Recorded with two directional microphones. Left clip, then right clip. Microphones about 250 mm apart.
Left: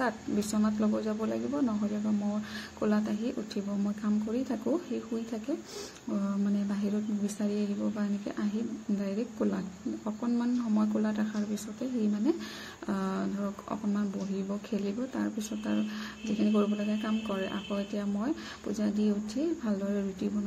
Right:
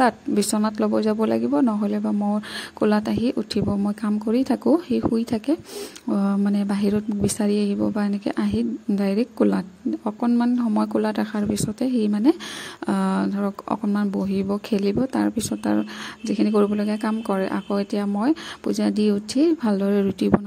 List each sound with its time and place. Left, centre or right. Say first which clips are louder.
0.0 s speech: right 12 dB; right